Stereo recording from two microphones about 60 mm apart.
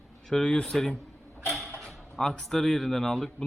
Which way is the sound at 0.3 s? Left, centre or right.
Centre.